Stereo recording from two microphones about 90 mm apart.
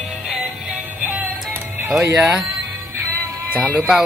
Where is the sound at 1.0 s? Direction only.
25° right (ahead or behind).